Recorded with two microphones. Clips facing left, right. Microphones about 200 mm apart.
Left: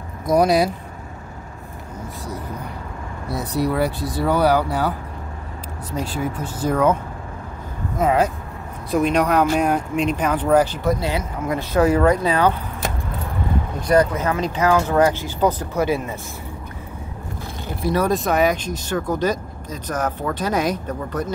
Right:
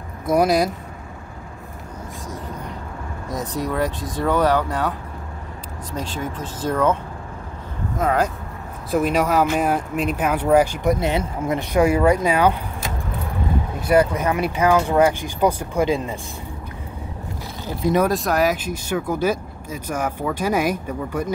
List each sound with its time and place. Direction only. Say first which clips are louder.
0.3 s speech: left 1 dB; centre (ahead or behind)
3.3 s speech: left 3 dB; 10° left (ahead or behind)
6.0 s speech: left 3 dB; 10° left (ahead or behind)
8.0 s speech: left 2 dB; 5° left (ahead or behind); by 12.5 s 15° right (ahead or behind)
13.7 s speech: even; 10° right (ahead or behind)
17.8 s speech: right 2 dB; 15° right (ahead or behind)
18.1 s speech: left 1 dB; centre (ahead or behind)